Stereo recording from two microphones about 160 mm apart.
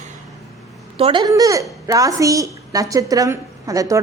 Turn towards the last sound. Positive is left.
turn(degrees=-20)  # may be behind; listen again after turning